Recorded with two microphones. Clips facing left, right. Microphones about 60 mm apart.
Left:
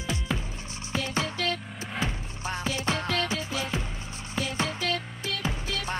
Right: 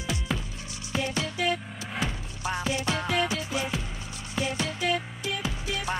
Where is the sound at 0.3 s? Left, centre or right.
Centre.